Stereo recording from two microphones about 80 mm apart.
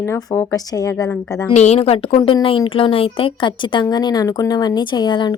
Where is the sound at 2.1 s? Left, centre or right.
Left.